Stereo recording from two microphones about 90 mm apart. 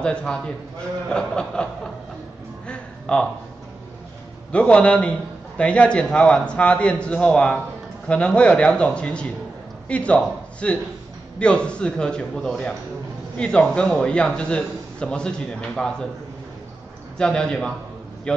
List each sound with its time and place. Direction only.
0.0 s a man's voice: 10° left (ahead or behind)
2.6 s music: 10° left (ahead or behind)
4.5 s a man's voice: 10° left (ahead or behind)
17.2 s a man's voice: 10° left (ahead or behind)